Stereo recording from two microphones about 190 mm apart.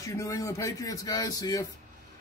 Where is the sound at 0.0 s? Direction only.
15° left (ahead or behind).